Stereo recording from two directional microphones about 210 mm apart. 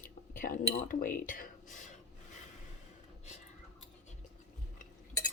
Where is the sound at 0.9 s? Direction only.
40° left (ahead or behind).